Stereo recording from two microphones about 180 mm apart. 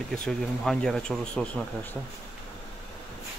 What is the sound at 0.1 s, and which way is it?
Speech, centre (ahead or behind).